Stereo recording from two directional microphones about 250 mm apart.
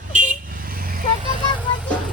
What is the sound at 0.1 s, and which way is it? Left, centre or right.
Vehicle, right.